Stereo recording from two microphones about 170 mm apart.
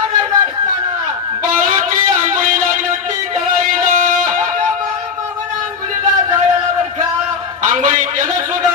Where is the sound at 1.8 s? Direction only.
50° right (ahead or behind).